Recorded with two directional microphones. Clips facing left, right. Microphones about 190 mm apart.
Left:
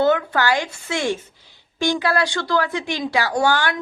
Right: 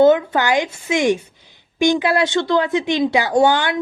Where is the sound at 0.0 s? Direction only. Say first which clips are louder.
Right 5 dB; 20° right (ahead or behind).